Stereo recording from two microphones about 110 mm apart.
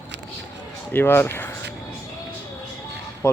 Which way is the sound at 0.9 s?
20° left (ahead or behind).